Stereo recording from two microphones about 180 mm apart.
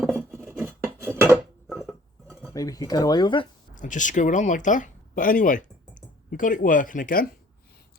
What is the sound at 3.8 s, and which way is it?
Speech, 45° left (ahead or behind).